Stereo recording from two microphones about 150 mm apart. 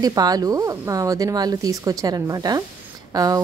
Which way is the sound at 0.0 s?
25° right (ahead or behind).